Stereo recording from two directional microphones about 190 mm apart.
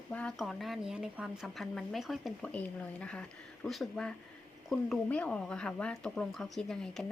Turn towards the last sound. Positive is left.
turn(degrees=0)  # may be behind; listen again after turning